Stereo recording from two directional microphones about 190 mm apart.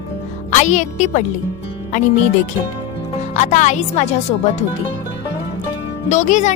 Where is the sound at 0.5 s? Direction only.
40° left (ahead or behind).